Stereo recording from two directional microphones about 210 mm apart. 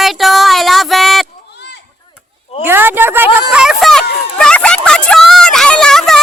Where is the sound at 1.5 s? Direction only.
55° left (ahead or behind).